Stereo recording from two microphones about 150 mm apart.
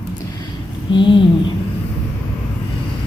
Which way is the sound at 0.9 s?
35° left (ahead or behind).